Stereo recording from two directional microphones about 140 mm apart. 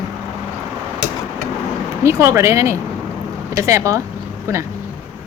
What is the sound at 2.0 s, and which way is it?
Speech, 20° right (ahead or behind).